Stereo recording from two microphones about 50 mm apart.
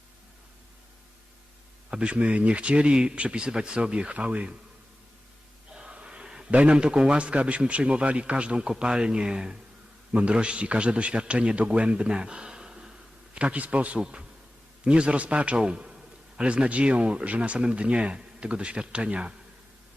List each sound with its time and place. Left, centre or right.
1.9 s a man's voice: right
5.7 s a sound: centre
6.5 s a man's voice: right
13.3 s a man's voice: right